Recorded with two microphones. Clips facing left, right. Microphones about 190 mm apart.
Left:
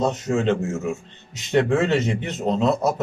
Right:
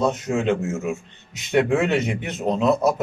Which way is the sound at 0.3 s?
15° right (ahead or behind).